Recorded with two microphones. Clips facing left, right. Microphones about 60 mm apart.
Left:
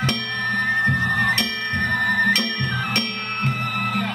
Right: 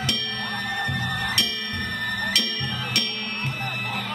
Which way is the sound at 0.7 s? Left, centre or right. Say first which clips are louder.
Left 7 dB; left.